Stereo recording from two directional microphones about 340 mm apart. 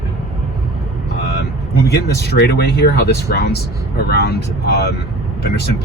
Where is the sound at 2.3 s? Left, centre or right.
Left.